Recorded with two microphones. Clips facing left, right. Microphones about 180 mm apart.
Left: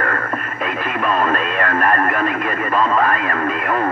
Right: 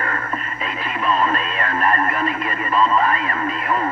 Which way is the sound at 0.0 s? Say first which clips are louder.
Left 4 dB; 55° left (ahead or behind).